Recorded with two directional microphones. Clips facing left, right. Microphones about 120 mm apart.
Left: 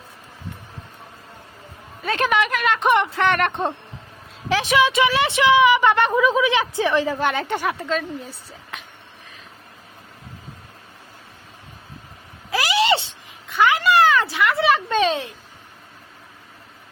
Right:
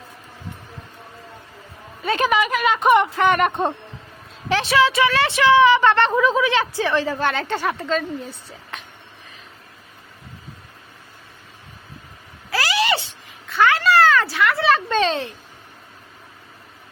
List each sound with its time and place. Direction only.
2.0 s a woman's voice: centre (ahead or behind)
4.6 s a woman's voice: 15° left (ahead or behind)
12.5 s vehicle: 20° left (ahead or behind)
13.5 s a sound: 15° left (ahead or behind)